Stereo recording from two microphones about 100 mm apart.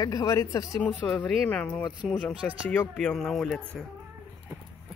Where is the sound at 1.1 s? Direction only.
15° left (ahead or behind).